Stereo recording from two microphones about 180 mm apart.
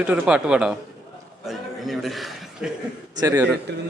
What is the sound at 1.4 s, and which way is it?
Chuckle, centre (ahead or behind).